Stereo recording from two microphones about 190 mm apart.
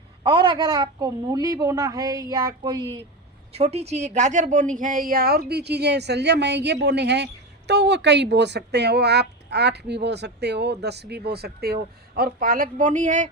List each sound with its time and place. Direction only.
0.2 s a woman's voice: 25° right (ahead or behind)
3.5 s speech: 35° right (ahead or behind)